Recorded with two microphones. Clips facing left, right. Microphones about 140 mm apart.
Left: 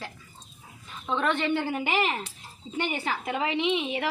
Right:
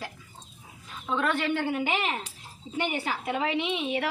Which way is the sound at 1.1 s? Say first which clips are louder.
Left 1 dB; 5° right (ahead or behind).